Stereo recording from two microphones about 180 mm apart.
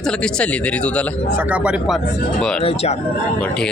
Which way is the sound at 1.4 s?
5° right (ahead or behind).